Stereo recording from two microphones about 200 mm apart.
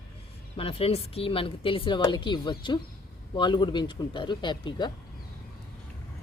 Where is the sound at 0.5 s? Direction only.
30° left (ahead or behind).